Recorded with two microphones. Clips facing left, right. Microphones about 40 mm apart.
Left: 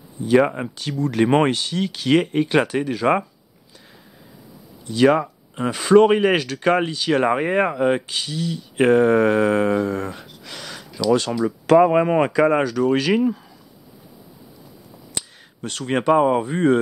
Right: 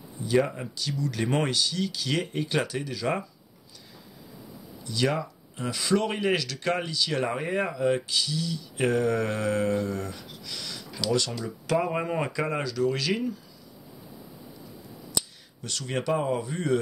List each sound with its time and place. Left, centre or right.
0.2 s speech: left
4.8 s speech: left
15.1 s speech: left